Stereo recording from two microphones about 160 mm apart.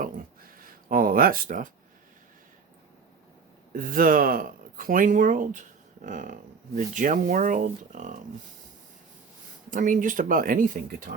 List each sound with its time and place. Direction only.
0.0 s a sound: 60° right (ahead or behind)
3.8 s speech: 60° right (ahead or behind)
9.6 s speech: 55° right (ahead or behind)